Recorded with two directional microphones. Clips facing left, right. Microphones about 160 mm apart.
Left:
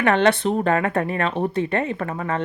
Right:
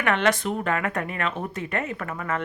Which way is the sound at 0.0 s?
30° left (ahead or behind).